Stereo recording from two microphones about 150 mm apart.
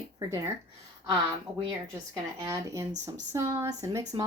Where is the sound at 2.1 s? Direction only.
25° right (ahead or behind).